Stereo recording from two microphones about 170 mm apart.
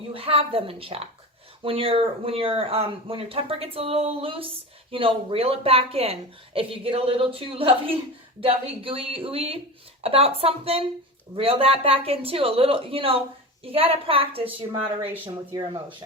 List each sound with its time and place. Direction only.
0.1 s speech: 35° right (ahead or behind)
14.7 s speech: 10° right (ahead or behind)